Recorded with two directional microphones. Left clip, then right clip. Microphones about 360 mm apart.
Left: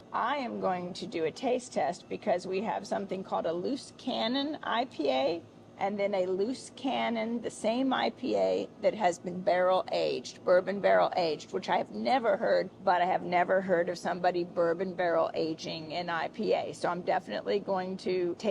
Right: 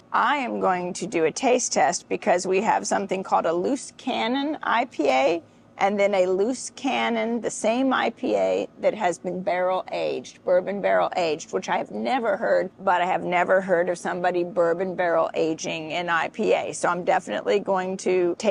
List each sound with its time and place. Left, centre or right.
0.1 s a woman's voice: right